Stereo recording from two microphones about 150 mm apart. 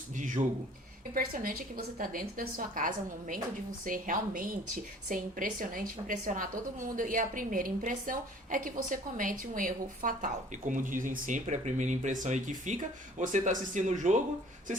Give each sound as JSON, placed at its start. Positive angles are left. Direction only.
{"t": 1.1, "sound": "a woman's voice", "side_deg": -70}